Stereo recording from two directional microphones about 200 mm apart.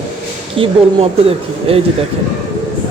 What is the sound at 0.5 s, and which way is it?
Speech, 25° right (ahead or behind).